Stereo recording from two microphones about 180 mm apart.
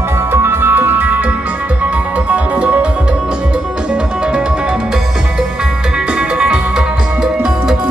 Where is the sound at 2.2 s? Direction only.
10° right (ahead or behind).